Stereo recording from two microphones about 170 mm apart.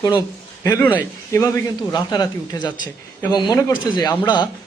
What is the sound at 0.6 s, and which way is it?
A man's voice, 15° left (ahead or behind).